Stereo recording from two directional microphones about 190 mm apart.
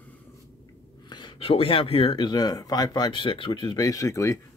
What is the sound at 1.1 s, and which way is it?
Speech, 25° left (ahead or behind).